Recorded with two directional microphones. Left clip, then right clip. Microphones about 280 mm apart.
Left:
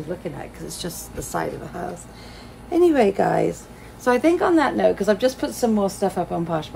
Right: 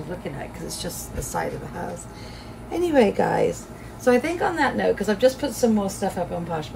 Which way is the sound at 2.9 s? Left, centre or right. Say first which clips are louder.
Left 1 dB; centre.